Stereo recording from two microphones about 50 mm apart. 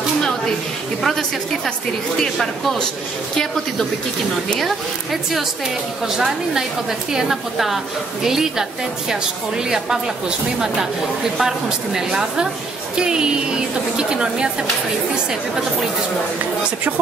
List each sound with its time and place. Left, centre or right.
1.0 s a woman's voice: centre
6.0 s a woman's voice: centre
11.3 s a woman's voice: centre